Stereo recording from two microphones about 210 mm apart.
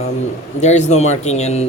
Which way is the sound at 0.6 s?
35° left (ahead or behind).